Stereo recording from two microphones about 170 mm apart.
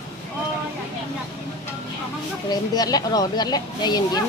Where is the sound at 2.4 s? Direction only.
25° left (ahead or behind).